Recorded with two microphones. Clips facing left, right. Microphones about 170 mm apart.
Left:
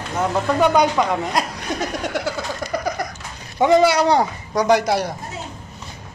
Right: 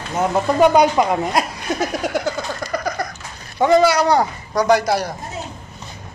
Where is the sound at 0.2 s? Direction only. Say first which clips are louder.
Right 3 dB; 10° right (ahead or behind).